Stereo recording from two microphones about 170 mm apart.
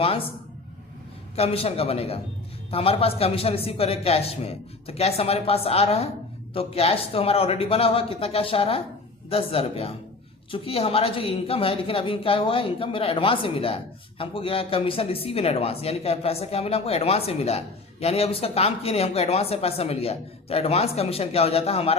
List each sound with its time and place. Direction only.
0.0 s speech: 35° left (ahead or behind)
1.4 s speech: 35° left (ahead or behind)